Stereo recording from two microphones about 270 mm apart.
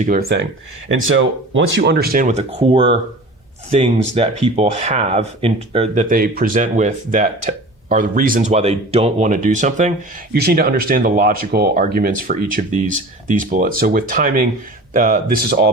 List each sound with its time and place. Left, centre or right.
0.1 s speech: right